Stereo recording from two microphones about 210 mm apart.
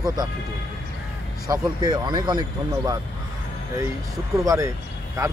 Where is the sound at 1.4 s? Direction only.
15° right (ahead or behind).